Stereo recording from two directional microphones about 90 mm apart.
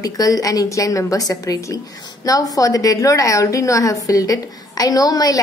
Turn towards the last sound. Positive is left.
turn(degrees=45)  # may be behind; listen again after turning